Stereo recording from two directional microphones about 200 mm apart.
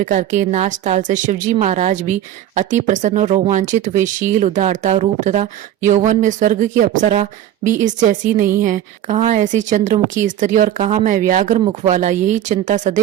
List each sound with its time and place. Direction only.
0.0 s speech: 40° right (ahead or behind)